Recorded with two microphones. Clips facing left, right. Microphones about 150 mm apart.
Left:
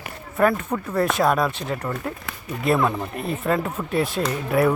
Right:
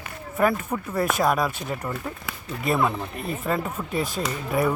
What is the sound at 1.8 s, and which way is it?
Speech, 5° right (ahead or behind).